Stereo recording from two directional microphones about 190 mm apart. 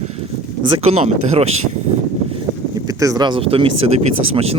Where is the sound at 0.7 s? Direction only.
35° right (ahead or behind).